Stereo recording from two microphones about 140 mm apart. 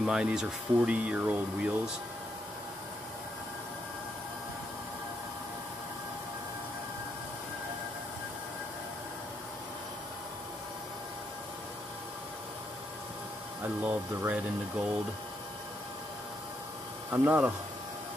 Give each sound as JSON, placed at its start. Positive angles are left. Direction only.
{"t": 0.0, "sound": "speech", "side_deg": -5}
{"t": 13.8, "sound": "speech", "side_deg": -10}
{"t": 17.1, "sound": "speech", "side_deg": -15}